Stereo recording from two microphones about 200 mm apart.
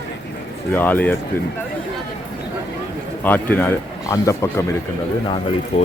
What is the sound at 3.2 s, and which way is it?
Speech, 10° left (ahead or behind).